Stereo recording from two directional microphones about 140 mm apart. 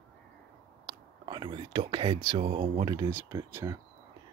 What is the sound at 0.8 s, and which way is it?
Speech, 30° right (ahead or behind).